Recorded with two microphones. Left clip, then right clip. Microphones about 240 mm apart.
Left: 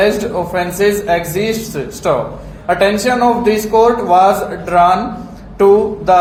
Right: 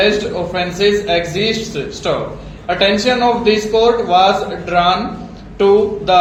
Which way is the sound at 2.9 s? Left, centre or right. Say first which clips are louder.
Left 1 dB; left.